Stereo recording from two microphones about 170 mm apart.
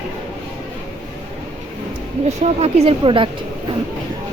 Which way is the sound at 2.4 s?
35° right (ahead or behind).